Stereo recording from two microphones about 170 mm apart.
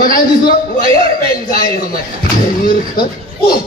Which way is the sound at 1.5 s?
60° left (ahead or behind).